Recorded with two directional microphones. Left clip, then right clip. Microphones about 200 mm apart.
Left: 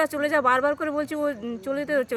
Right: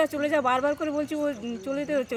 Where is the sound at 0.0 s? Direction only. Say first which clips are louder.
Left 2 dB; 20° left (ahead or behind).